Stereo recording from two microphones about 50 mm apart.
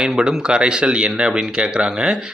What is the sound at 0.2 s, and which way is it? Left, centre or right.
Speech, centre.